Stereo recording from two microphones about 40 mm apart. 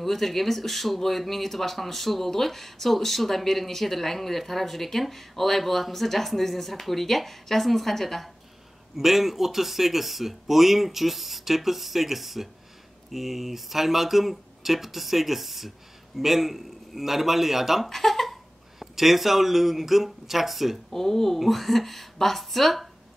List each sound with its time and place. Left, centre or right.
0.0 s speech: centre
8.9 s a man's voice: centre